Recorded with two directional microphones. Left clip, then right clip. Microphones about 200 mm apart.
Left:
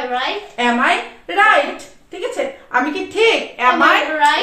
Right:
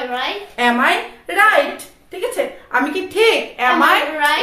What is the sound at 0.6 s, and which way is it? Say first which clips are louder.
A woman's voice: right 1 dB; 20° right (ahead or behind).